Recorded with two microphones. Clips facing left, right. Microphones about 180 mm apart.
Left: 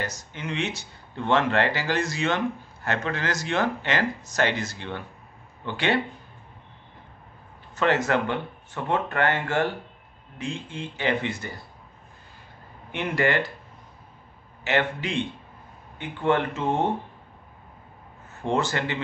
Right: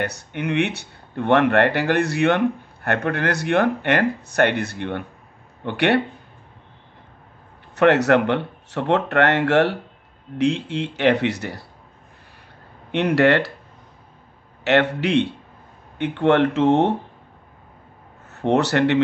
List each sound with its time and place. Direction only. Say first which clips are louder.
0.0 s speech: right 7 dB; 65° right (ahead or behind)
7.7 s speech: right 7 dB; 70° right (ahead or behind)
12.9 s speech: right 8 dB; 75° right (ahead or behind)
14.6 s speech: right 7 dB; 70° right (ahead or behind)
18.3 s speech: right 7 dB; 70° right (ahead or behind)